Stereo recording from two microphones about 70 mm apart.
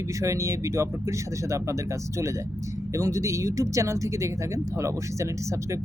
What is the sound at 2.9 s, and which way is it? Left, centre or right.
Speech, right.